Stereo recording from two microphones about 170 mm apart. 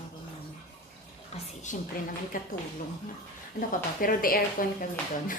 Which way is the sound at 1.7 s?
45° left (ahead or behind).